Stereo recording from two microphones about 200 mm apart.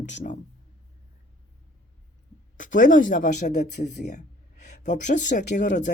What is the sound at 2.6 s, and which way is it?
Speech, 40° left (ahead or behind).